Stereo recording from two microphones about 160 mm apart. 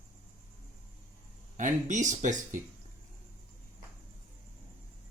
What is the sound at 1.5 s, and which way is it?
Speech, 50° right (ahead or behind).